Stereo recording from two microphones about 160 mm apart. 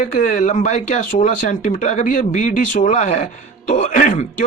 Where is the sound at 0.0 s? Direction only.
55° left (ahead or behind).